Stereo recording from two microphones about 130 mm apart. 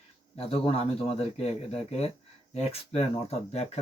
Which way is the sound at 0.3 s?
50° left (ahead or behind).